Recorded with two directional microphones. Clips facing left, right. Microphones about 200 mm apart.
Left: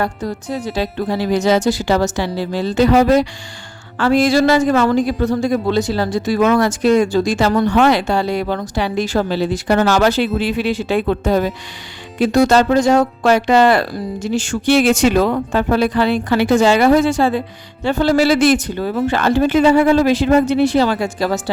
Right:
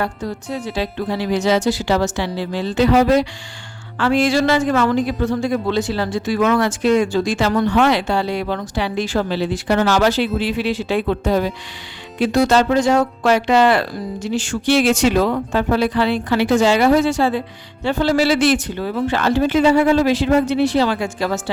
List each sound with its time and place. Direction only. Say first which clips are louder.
0.0 s speech: left 2 dB; 40° left (ahead or behind)